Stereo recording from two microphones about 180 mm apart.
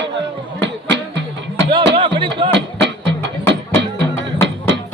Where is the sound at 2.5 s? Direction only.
75° right (ahead or behind).